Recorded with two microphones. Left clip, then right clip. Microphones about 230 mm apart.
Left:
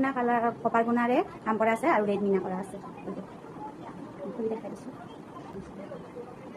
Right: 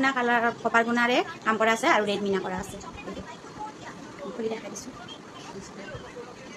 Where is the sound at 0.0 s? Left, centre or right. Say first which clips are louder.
Right 3 dB; right.